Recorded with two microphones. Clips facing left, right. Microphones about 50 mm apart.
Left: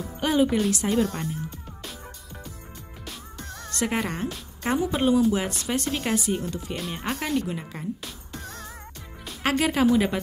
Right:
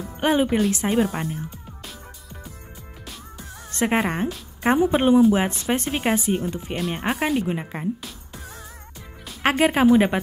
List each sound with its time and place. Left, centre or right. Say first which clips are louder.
0.2 s speech: right 2 dB; right
3.7 s speech: right 5 dB; right
9.4 s speech: right 4 dB; right